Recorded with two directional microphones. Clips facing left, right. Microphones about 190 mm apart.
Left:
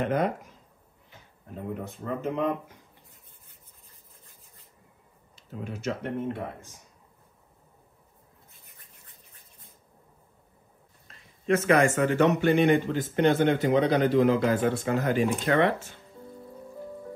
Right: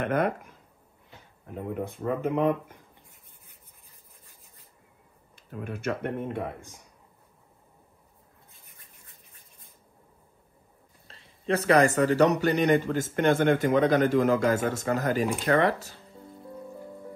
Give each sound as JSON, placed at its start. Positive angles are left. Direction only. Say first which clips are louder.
{"t": 0.0, "sound": "speech", "louder": "even", "side_deg": -55}
{"t": 1.7, "sound": "speech", "louder": "right 4 dB", "side_deg": -55}
{"t": 5.3, "sound": "speech", "louder": "right 1 dB", "side_deg": -55}
{"t": 11.1, "sound": "a man's voice", "louder": "left 2 dB", "side_deg": -30}